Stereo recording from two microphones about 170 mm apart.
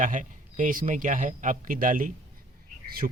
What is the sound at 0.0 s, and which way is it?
A man's voice, 50° right (ahead or behind).